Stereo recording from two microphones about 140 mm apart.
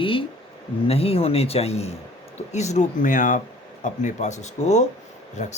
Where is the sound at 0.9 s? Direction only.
45° left (ahead or behind); by 3.4 s 70° left (ahead or behind).